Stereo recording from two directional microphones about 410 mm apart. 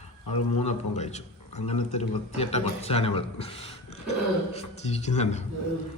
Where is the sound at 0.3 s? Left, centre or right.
Left.